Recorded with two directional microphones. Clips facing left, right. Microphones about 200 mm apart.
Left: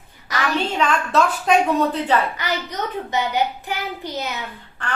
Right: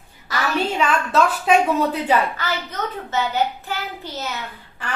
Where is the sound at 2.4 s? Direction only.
15° left (ahead or behind).